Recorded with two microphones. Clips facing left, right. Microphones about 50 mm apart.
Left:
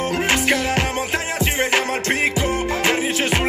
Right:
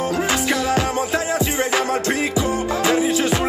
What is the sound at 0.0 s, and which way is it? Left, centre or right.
Music, left.